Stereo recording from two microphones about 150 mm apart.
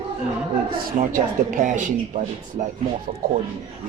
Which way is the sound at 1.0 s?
65° right (ahead or behind).